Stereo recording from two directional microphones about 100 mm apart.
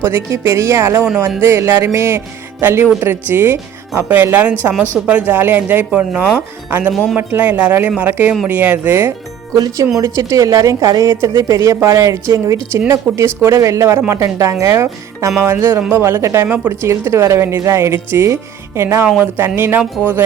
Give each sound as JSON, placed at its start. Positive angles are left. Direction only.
{"t": 0.0, "sound": "a woman's voice", "side_deg": -25}